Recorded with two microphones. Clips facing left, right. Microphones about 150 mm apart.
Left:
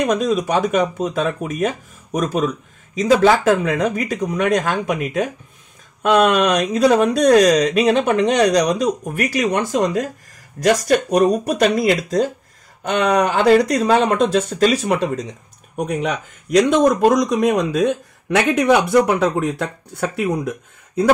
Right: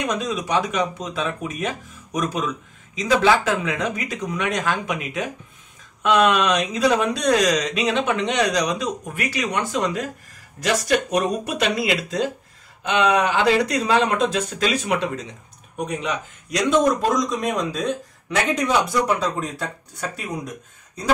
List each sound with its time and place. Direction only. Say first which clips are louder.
0.0 s speech: left 7 dB; 40° left (ahead or behind); by 21.1 s 60° left (ahead or behind)